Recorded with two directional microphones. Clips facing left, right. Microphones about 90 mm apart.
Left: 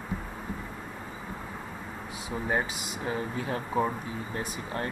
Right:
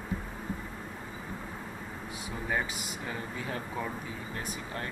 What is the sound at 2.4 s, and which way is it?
Speech, 30° left (ahead or behind).